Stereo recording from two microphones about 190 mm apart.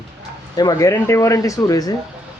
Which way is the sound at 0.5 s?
20° left (ahead or behind).